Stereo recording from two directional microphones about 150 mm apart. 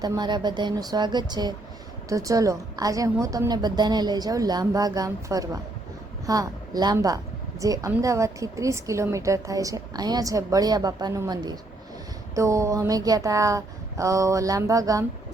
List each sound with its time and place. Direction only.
0.0 s a woman's voice: 30° right (ahead or behind)